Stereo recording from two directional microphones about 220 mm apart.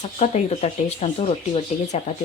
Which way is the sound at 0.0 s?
30° left (ahead or behind).